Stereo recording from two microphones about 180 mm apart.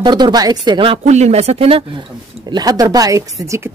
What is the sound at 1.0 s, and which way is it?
Speech, 40° right (ahead or behind).